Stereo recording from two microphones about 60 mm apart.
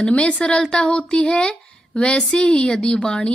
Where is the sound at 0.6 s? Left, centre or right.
Centre.